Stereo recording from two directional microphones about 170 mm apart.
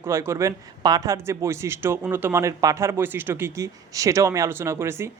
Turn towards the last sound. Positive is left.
turn(degrees=-15)  # may be behind; listen again after turning